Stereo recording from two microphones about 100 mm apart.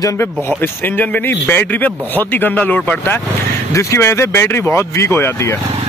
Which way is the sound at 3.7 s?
30° left (ahead or behind).